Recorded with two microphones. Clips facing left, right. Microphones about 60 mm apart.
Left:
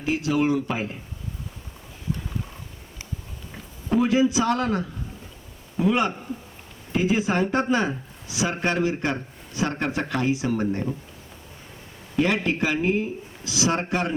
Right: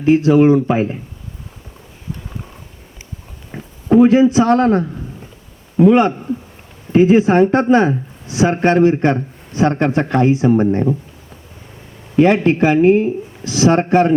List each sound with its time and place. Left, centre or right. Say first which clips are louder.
0.0 s speech: right 12 dB; right
3.5 s a sound: right 12 dB; right
3.9 s speech: right 10 dB; right
12.1 s speech: right 11 dB; right